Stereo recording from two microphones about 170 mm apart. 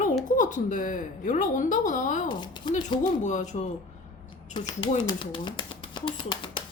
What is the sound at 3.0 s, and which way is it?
Speech, 45° left (ahead or behind).